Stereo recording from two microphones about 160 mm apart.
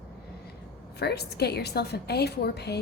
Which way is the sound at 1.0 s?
90° left.